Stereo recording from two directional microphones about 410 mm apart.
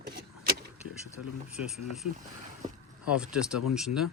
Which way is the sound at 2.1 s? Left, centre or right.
Centre.